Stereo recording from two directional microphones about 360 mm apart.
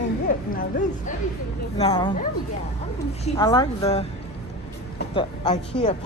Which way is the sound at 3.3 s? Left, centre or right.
Centre.